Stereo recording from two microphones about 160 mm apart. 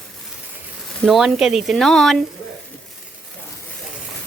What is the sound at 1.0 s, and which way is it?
Speech, centre (ahead or behind).